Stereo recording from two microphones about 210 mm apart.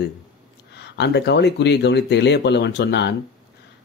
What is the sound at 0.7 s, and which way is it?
Speech, 55° left (ahead or behind).